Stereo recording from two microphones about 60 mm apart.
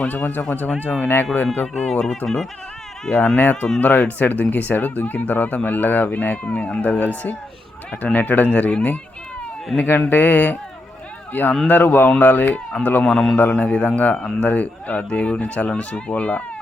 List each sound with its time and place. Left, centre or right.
0.0 s speech: left
1.5 s speech: centre
3.1 s speech: centre
3.3 s speech: left
13.1 s speech: centre
13.6 s speech: centre